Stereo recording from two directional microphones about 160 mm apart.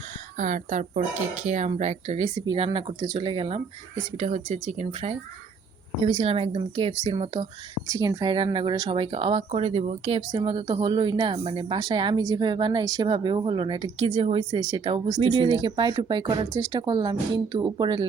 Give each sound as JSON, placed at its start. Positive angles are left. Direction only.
{"t": 0.3, "sound": "speech", "side_deg": -55}
{"t": 2.4, "sound": "a woman's voice", "side_deg": -30}
{"t": 10.2, "sound": "speech", "side_deg": -30}